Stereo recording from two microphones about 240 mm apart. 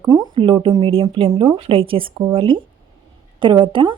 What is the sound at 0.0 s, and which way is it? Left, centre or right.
Speech, centre.